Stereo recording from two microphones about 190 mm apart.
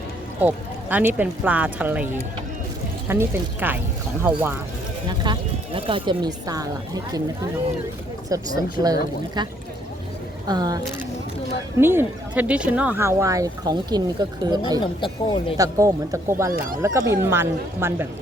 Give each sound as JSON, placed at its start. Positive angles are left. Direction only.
{"t": 0.4, "sound": "speech", "side_deg": -10}
{"t": 3.1, "sound": "speech", "side_deg": -10}
{"t": 5.0, "sound": "speech", "side_deg": -25}
{"t": 8.3, "sound": "speech", "side_deg": -20}
{"t": 11.8, "sound": "speech", "side_deg": -10}
{"t": 14.8, "sound": "speech", "side_deg": 25}
{"t": 15.5, "sound": "speech", "side_deg": -20}